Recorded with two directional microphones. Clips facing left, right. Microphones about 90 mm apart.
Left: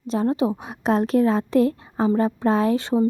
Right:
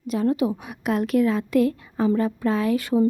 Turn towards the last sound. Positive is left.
turn(degrees=30)  # may be behind; listen again after turning